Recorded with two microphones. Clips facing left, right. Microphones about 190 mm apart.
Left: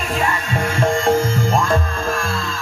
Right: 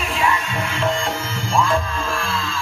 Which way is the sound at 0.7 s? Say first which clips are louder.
Left 7 dB; 45° left (ahead or behind).